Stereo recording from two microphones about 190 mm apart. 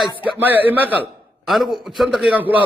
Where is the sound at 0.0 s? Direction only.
10° right (ahead or behind).